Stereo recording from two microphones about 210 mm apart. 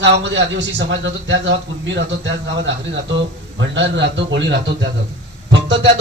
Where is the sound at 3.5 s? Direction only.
60° right (ahead or behind).